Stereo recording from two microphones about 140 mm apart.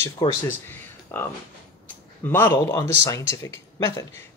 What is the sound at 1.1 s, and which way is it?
Speech, 15° left (ahead or behind).